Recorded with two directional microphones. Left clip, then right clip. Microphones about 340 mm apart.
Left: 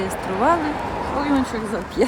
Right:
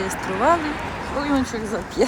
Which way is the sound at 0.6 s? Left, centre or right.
Left.